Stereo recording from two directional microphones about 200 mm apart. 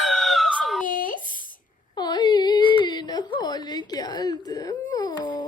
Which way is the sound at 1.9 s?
20° left (ahead or behind).